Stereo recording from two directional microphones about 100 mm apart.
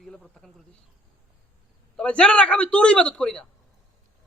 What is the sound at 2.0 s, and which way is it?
Speech, 10° left (ahead or behind).